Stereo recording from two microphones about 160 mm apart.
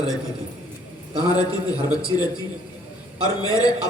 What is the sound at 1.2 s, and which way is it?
A man's voice, 25° left (ahead or behind).